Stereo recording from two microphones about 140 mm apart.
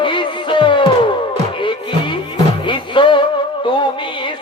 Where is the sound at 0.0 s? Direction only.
35° left (ahead or behind).